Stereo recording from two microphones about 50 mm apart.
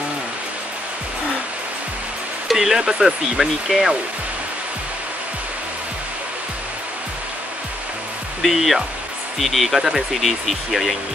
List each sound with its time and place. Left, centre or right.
2.4 s speech: centre
8.4 s speech: centre